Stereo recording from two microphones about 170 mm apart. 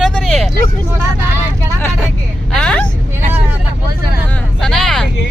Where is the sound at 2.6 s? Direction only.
5° left (ahead or behind).